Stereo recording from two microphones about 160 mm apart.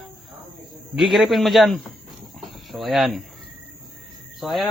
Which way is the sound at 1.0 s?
Centre (ahead or behind).